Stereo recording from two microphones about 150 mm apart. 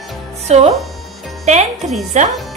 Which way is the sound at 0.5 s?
45° right (ahead or behind).